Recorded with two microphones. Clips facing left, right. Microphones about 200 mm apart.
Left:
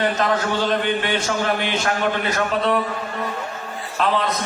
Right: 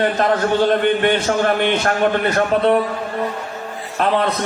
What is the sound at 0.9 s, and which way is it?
A man's voice, 55° right (ahead or behind).